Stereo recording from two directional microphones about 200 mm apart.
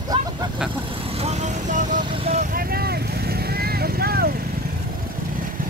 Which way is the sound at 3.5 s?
50° right (ahead or behind).